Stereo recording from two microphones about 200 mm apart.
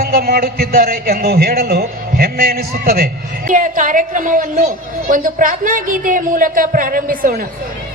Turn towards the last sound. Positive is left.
turn(degrees=-45)  # may be behind; listen again after turning